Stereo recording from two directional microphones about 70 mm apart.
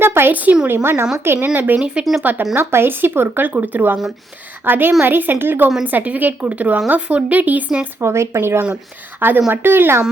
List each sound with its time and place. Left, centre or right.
0.0 s a woman's voice: right
1.5 s a woman's voice: right
2.6 s a woman's voice: right
7.9 s a woman's voice: right